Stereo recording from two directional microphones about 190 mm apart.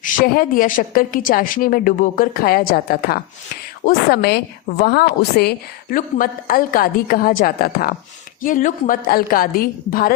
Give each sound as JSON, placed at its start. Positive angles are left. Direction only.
{"t": 0.0, "sound": "a woman's voice", "side_deg": 50}